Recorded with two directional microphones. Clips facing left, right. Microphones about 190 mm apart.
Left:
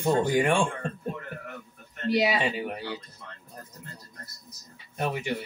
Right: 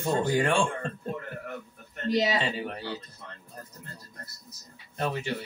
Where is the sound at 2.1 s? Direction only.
10° left (ahead or behind).